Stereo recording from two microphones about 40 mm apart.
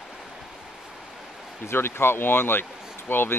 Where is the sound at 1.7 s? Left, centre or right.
Left.